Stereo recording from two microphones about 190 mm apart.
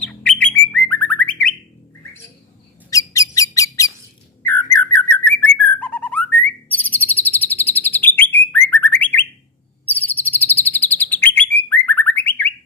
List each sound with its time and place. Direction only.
0.0 s bird: 5° left (ahead or behind)
2.9 s squeak: 15° left (ahead or behind)
4.5 s bird: 10° left (ahead or behind)